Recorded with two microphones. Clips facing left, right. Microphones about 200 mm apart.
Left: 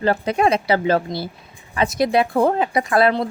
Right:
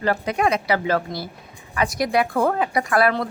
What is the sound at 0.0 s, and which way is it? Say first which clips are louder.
A woman's voice: left 3 dB; 30° left (ahead or behind).